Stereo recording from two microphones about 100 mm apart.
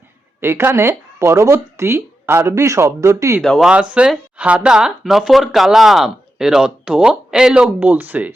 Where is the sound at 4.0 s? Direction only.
10° right (ahead or behind).